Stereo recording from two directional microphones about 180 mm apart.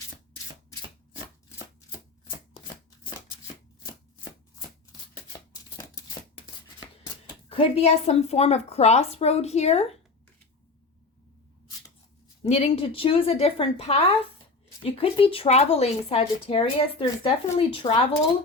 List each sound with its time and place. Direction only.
4.9 s a sound: 20° left (ahead or behind)
7.5 s speech: 35° left (ahead or behind)
12.4 s speech: 35° left (ahead or behind)